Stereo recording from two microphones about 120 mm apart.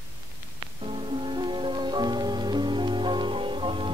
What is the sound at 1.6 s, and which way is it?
Music, 35° right (ahead or behind).